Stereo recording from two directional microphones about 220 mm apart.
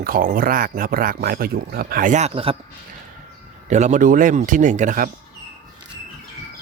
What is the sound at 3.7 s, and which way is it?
Speech, 35° right (ahead or behind).